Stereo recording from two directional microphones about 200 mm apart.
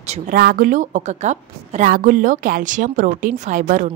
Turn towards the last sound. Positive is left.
turn(degrees=-40)  # may be behind; listen again after turning